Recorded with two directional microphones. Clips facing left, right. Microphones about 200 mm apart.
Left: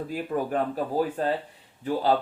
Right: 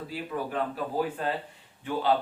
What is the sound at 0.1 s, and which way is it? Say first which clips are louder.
Speech: left 5 dB; 45° left (ahead or behind).